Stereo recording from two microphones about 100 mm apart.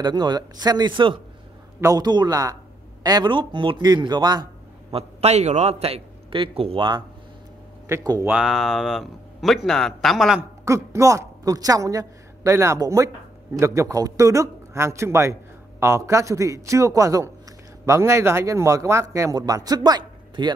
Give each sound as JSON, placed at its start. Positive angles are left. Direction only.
{"t": 0.0, "sound": "speech", "side_deg": -45}
{"t": 1.8, "sound": "speech", "side_deg": -40}
{"t": 3.8, "sound": "speech", "side_deg": -45}
{"t": 4.9, "sound": "a man's voice", "side_deg": -90}
{"t": 8.0, "sound": "speech", "side_deg": -40}
{"t": 8.3, "sound": "a man's voice", "side_deg": -5}
{"t": 10.6, "sound": "a woman's voice", "side_deg": -30}